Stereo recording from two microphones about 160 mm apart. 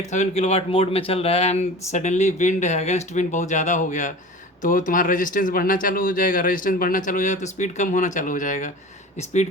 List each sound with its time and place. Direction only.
0.1 s a man's voice: 45° left (ahead or behind)